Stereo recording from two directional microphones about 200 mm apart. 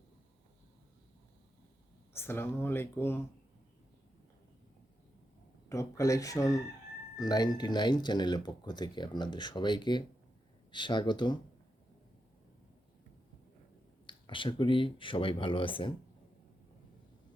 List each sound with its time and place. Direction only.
2.1 s speech: 10° left (ahead or behind)
5.6 s speech: 15° left (ahead or behind)
14.1 s speech: 25° left (ahead or behind)